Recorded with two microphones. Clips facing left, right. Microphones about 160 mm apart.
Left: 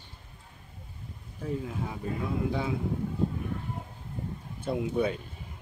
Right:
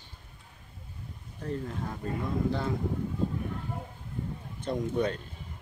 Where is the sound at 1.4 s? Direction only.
5° left (ahead or behind).